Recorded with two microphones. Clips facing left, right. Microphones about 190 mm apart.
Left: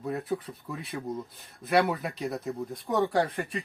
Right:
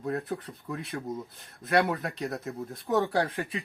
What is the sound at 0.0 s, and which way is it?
Speech, centre (ahead or behind).